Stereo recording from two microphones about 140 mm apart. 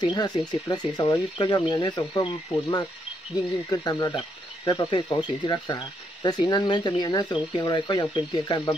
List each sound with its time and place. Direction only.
0.0 s speech: 30° left (ahead or behind)